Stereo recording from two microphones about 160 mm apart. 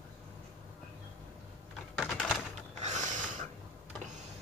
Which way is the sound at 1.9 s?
Centre (ahead or behind).